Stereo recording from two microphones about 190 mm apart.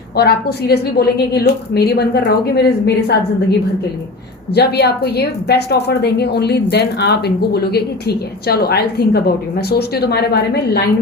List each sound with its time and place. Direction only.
0.2 s a woman's voice: 55° left (ahead or behind)
4.5 s a woman's voice: 60° left (ahead or behind)